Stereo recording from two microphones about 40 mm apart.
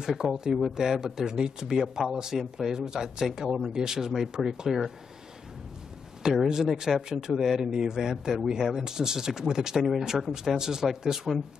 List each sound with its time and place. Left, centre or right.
0.2 s a man's voice: centre
6.5 s a man's voice: centre